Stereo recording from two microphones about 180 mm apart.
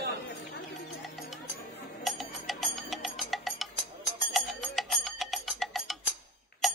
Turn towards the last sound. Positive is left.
turn(degrees=0)  # may be behind; listen again after turning